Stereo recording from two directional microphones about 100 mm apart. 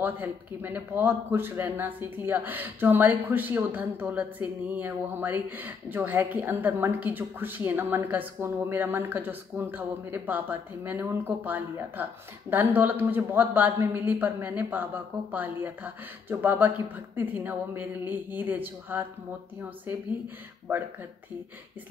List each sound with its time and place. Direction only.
0.0 s speech: 20° right (ahead or behind)